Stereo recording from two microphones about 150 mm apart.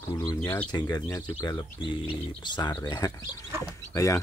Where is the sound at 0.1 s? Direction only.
25° left (ahead or behind).